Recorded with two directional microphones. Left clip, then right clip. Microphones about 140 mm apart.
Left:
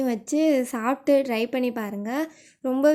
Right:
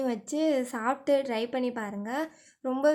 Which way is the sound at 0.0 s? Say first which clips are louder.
Left 5 dB; 15° left (ahead or behind).